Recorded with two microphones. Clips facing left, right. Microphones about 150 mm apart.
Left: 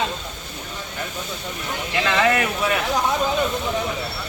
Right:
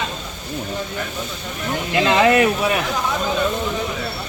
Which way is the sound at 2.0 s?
25° right (ahead or behind).